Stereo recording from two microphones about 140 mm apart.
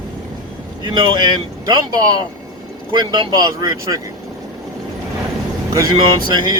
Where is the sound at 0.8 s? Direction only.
30° right (ahead or behind).